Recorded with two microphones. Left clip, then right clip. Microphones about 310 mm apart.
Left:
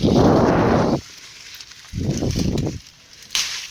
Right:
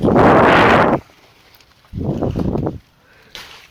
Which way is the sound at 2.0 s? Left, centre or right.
Right.